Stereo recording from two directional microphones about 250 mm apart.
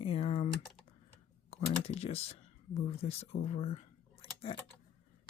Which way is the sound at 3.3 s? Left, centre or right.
Left.